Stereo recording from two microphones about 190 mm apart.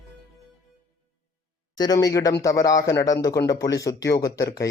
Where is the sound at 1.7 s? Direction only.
20° left (ahead or behind).